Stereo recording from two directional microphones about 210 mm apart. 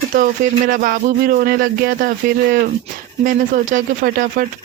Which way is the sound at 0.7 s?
40° right (ahead or behind).